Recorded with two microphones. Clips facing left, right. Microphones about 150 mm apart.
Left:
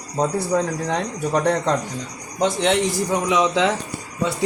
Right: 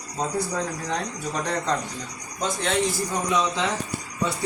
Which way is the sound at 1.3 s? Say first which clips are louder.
Left 9 dB; 60° left (ahead or behind).